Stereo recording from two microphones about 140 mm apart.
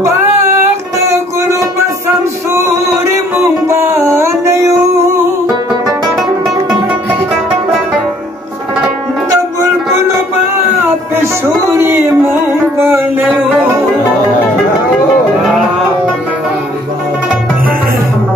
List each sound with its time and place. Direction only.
0.9 s a sound: 20° right (ahead or behind)
3.6 s music: 20° right (ahead or behind)
5.9 s music: centre (ahead or behind)
9.9 s music: 20° right (ahead or behind)